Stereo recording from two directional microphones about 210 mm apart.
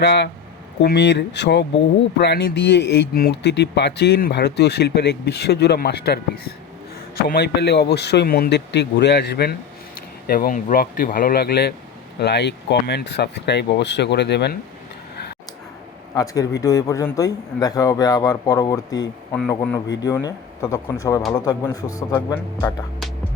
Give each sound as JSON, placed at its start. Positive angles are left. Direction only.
{"t": 0.0, "sound": "speech", "side_deg": 55}
{"t": 16.1, "sound": "a man's voice", "side_deg": 15}